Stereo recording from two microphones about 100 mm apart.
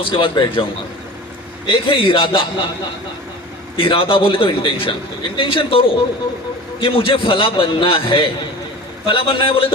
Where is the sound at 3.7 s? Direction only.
65° left (ahead or behind).